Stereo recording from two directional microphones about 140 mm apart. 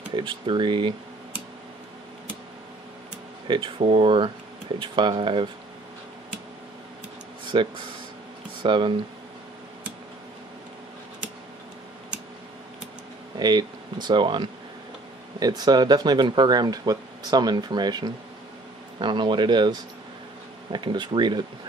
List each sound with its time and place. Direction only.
0.1 s speech: 35° right (ahead or behind)
3.4 s speech: 35° right (ahead or behind)
7.5 s speech: 35° right (ahead or behind)
13.4 s speech: 30° right (ahead or behind)